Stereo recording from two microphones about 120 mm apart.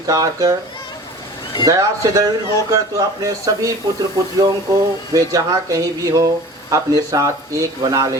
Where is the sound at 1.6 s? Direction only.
30° right (ahead or behind).